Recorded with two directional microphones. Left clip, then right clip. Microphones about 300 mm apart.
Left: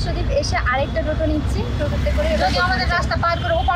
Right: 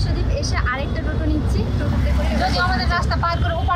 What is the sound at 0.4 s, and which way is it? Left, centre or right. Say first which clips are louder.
Vehicle: left 5 dB; centre.